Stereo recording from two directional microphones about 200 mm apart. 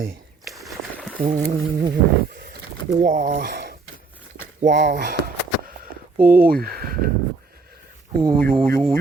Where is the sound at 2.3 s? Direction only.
45° right (ahead or behind).